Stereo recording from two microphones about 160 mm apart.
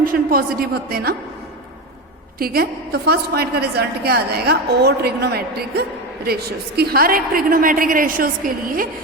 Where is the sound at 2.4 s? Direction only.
70° right (ahead or behind).